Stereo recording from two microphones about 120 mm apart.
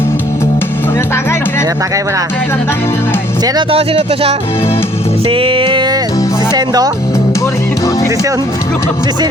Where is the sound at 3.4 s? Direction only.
35° right (ahead or behind).